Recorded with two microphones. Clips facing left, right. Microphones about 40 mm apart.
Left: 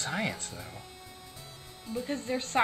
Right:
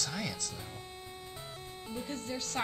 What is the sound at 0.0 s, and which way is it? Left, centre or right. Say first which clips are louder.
Speech: left 5 dB; left.